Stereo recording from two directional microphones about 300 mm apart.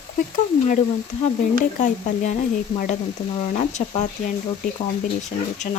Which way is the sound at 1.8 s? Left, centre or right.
Left.